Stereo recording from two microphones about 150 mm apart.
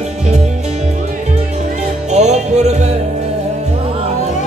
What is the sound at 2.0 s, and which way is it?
Music, 50° right (ahead or behind).